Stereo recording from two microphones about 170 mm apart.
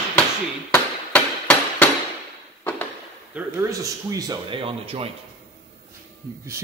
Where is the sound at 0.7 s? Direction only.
10° left (ahead or behind).